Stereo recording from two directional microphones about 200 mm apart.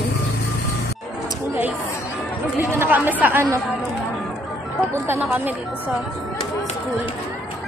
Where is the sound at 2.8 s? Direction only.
10° right (ahead or behind).